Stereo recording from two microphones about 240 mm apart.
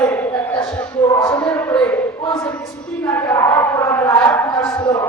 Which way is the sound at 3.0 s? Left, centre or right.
Centre.